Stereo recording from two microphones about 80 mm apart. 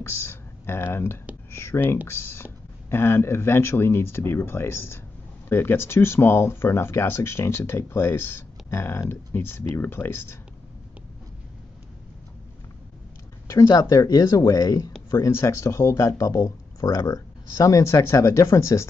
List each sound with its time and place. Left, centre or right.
0.0 s speech: left
13.5 s speech: left